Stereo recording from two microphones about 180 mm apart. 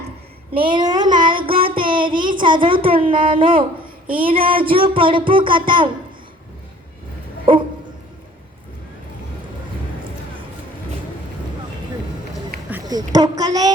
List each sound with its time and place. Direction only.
0.6 s child singing: 25° right (ahead or behind)
1.7 s a sound: 25° right (ahead or behind)
3.3 s music: 30° right (ahead or behind)
7.5 s music: 30° right (ahead or behind)
12.8 s a sound: 20° right (ahead or behind)
13.1 s music: 20° right (ahead or behind)